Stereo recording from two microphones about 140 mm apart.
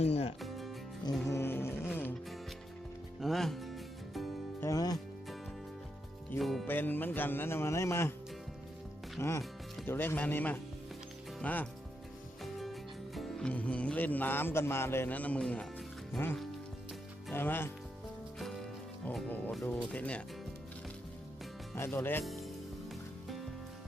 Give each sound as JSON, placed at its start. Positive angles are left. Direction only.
{"t": 0.0, "sound": "music", "side_deg": 50}
{"t": 0.4, "sound": "music", "side_deg": 0}
{"t": 1.2, "sound": "music", "side_deg": 15}
{"t": 3.2, "sound": "music", "side_deg": 0}
{"t": 4.6, "sound": "music", "side_deg": 25}
{"t": 6.4, "sound": "music", "side_deg": 0}
{"t": 6.7, "sound": "speech", "side_deg": 15}
{"t": 9.2, "sound": "speech", "side_deg": 20}
{"t": 12.4, "sound": "music", "side_deg": 0}
{"t": 13.1, "sound": "speech", "side_deg": 0}
{"t": 18.3, "sound": "music", "side_deg": 0}
{"t": 19.3, "sound": "speech", "side_deg": 10}
{"t": 21.8, "sound": "speech", "side_deg": 15}
{"t": 22.2, "sound": "music", "side_deg": 0}